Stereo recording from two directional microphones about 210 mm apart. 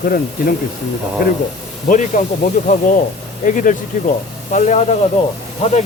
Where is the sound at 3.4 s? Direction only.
40° left (ahead or behind).